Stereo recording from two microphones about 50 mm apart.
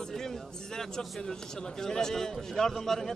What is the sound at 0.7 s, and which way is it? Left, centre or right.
Speech, centre.